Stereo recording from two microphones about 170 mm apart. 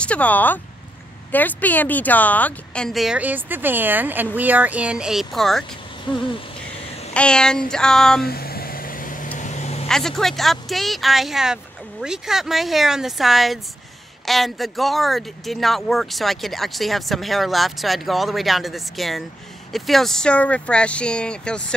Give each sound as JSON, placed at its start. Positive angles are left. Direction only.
{"t": 0.0, "sound": "speech", "side_deg": 10}
{"t": 7.2, "sound": "speech", "side_deg": 5}
{"t": 8.2, "sound": "vehicle", "side_deg": 65}
{"t": 9.8, "sound": "speech", "side_deg": 5}